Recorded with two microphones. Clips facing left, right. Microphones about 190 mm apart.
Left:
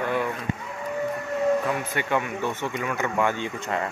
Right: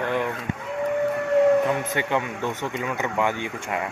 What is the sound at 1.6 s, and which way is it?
Speech, 20° right (ahead or behind).